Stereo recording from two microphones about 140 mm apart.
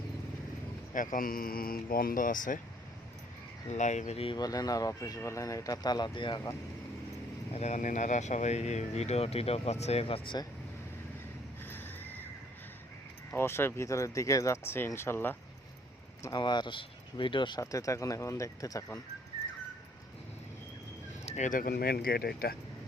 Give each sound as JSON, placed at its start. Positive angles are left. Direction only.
{"t": 0.9, "sound": "speech", "side_deg": 75}
{"t": 3.7, "sound": "speech", "side_deg": 55}
{"t": 4.4, "sound": "speech", "side_deg": 25}
{"t": 7.5, "sound": "speech", "side_deg": 55}
{"t": 11.6, "sound": "a sound", "side_deg": 15}
{"t": 13.3, "sound": "speech", "side_deg": 15}
{"t": 16.2, "sound": "speech", "side_deg": 30}
{"t": 17.6, "sound": "speech", "side_deg": 25}
{"t": 21.2, "sound": "speech", "side_deg": 60}